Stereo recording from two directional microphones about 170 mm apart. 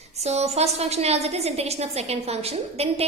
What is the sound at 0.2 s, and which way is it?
A woman's voice, 40° right (ahead or behind).